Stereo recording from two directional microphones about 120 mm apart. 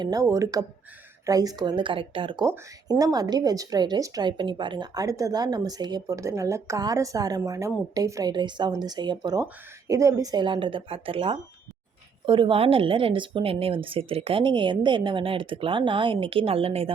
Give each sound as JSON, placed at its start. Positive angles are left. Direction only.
{"t": 0.0, "sound": "speech", "side_deg": -30}
{"t": 2.4, "sound": "speech", "side_deg": -30}
{"t": 10.3, "sound": "a woman's voice", "side_deg": -40}